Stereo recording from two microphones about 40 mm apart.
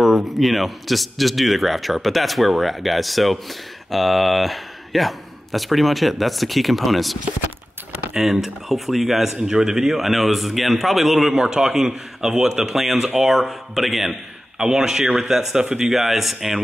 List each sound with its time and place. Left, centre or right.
0.0 s speech: centre
8.2 s a man's voice: centre